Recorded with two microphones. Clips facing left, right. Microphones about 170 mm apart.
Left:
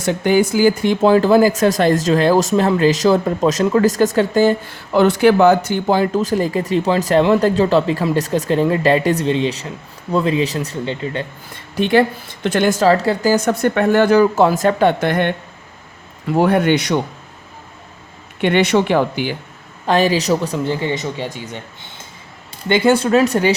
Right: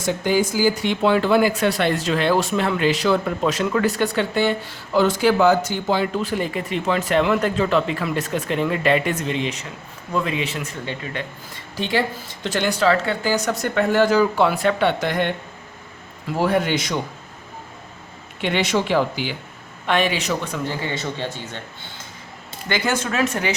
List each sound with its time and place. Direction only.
0.0 s speech: 60° left (ahead or behind)
0.9 s speech: 40° left (ahead or behind)
4.9 s speech: 60° left (ahead or behind); by 11.3 s 30° left (ahead or behind)
11.8 s speech: 55° left (ahead or behind)
16.4 s speech: 55° left (ahead or behind)
18.3 s speech: 55° left (ahead or behind)
19.9 s speech: 35° left (ahead or behind); by 21.6 s 15° left (ahead or behind)
22.7 s speech: 30° left (ahead or behind)